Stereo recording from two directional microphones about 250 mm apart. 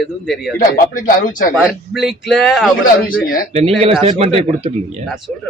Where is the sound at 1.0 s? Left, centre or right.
Left.